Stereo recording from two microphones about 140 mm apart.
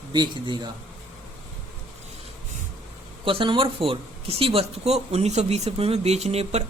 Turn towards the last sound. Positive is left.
turn(degrees=-50)  # may be behind; listen again after turning